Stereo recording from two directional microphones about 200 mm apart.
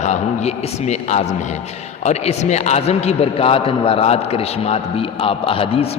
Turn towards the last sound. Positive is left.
turn(degrees=30)  # may be behind; listen again after turning